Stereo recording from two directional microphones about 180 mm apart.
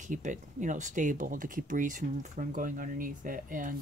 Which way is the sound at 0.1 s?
45° right (ahead or behind).